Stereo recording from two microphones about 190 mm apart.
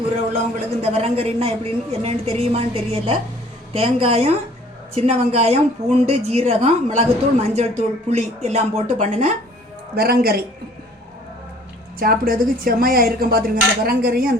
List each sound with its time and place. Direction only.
0.8 s a woman's voice: 30° right (ahead or behind)
9.9 s speech: 55° right (ahead or behind)
11.9 s speech: 50° right (ahead or behind)